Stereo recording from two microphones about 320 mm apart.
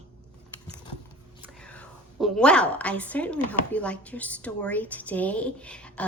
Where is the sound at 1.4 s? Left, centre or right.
Centre.